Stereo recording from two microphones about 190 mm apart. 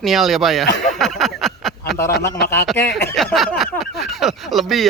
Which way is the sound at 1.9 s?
15° left (ahead or behind).